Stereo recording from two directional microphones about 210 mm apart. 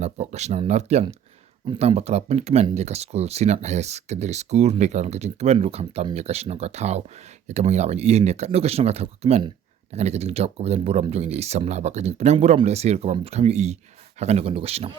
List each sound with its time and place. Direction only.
0.0 s speech: 30° right (ahead or behind)